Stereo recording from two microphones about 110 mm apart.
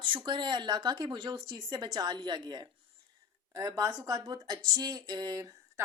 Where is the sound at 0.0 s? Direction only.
45° right (ahead or behind).